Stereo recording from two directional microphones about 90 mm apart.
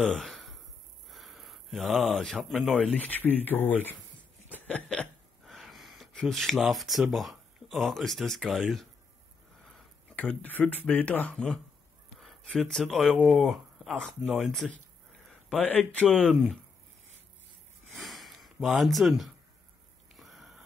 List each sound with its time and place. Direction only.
0.0 s a sound: 5° left (ahead or behind)
1.0 s gasp: centre (ahead or behind)
2.3 s speech: 5° right (ahead or behind)
3.1 s speech: 20° left (ahead or behind); by 8.6 s centre (ahead or behind)
10.1 s speech: 15° left (ahead or behind)
12.4 s speech: 5° left (ahead or behind)
15.9 s speech: 15° left (ahead or behind)
16.2 s speech: centre (ahead or behind)
17.9 s gasp: centre (ahead or behind)
20.2 s sniff: centre (ahead or behind)